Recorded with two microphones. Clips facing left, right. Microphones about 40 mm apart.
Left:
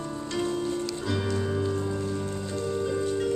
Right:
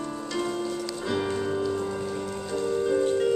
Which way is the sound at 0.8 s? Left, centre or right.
Centre.